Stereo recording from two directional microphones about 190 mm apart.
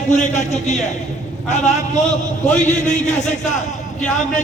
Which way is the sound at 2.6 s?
40° left (ahead or behind).